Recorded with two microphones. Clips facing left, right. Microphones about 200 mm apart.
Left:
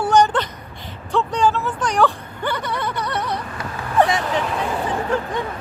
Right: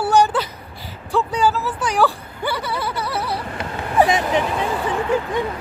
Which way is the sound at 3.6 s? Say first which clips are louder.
Right 2 dB; 25° right (ahead or behind).